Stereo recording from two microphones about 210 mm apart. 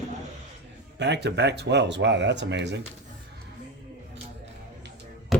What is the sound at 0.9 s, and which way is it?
Speech, 55° right (ahead or behind).